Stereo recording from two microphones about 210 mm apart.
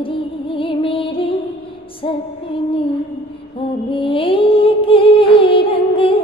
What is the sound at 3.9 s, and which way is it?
Music, 25° left (ahead or behind).